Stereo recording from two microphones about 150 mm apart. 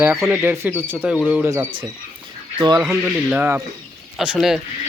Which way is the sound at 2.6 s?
30° right (ahead or behind).